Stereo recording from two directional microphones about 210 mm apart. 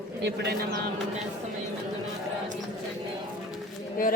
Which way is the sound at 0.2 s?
55° right (ahead or behind).